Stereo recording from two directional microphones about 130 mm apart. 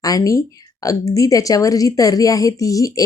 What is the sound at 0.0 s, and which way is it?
Speech, 25° left (ahead or behind).